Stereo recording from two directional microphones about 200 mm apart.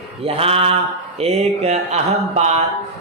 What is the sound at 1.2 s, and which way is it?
Speech, 35° right (ahead or behind).